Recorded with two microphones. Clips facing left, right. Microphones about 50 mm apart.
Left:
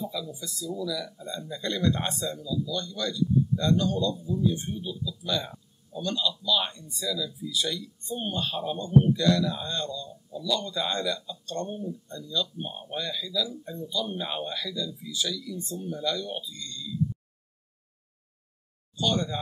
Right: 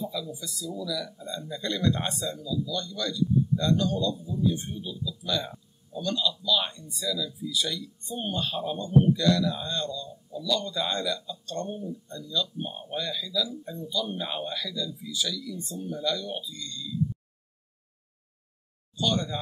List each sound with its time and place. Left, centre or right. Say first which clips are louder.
0.0 s speech: even; centre
18.9 s speech: even; centre